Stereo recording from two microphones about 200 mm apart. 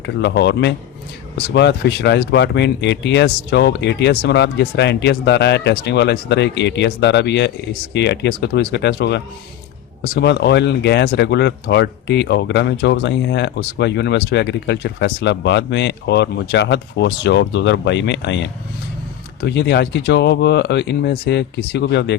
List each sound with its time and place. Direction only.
0.0 s speech: 60° left (ahead or behind)